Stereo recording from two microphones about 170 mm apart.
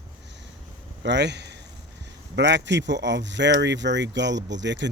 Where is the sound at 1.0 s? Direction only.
90° right.